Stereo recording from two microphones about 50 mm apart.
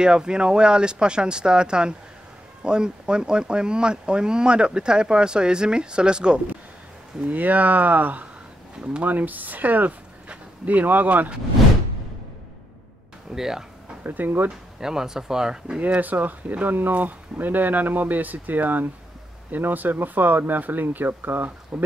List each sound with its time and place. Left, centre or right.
0.0 s speech: centre
7.2 s speech: right
10.2 s a sound: right
10.7 s speech: right
13.3 s speech: centre
14.0 s speech: right
14.8 s speech: centre
16.0 s speech: right